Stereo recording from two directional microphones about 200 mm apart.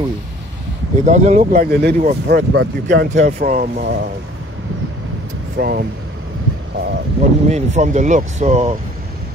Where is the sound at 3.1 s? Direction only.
40° right (ahead or behind).